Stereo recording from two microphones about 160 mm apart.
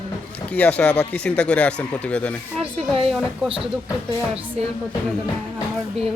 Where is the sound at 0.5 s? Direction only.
5° left (ahead or behind).